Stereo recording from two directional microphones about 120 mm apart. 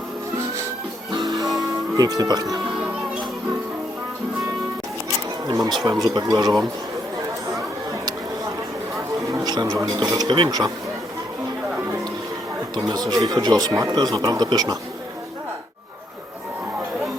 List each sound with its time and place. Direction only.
1.1 s music: 35° right (ahead or behind)
2.0 s speech: 30° right (ahead or behind)
5.5 s speech: 35° right (ahead or behind)
9.3 s speech: 35° right (ahead or behind)
12.7 s speech: 35° right (ahead or behind)